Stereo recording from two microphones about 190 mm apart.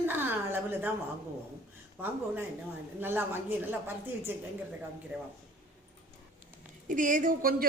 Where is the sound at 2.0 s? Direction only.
10° right (ahead or behind).